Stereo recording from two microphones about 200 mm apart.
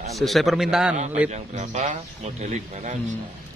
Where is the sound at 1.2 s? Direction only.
35° right (ahead or behind).